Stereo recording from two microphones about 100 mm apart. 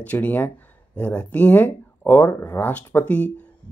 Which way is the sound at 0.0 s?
15° left (ahead or behind).